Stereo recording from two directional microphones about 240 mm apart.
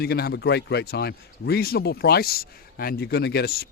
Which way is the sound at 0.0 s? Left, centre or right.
Left.